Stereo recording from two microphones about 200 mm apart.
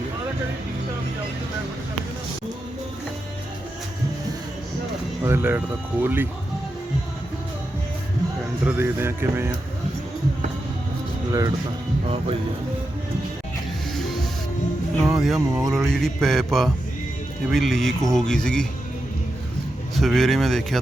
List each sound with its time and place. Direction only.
5.2 s speech: 10° right (ahead or behind)
8.6 s speech: 10° right (ahead or behind)
11.3 s speech: 20° right (ahead or behind)
13.9 s music: centre (ahead or behind)
15.1 s speech: centre (ahead or behind)
20.0 s speech: centre (ahead or behind)